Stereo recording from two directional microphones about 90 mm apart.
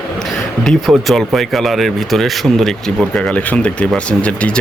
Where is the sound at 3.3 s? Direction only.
15° left (ahead or behind).